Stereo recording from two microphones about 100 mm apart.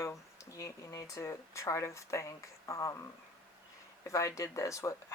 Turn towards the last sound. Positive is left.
turn(degrees=30)  # may be behind; listen again after turning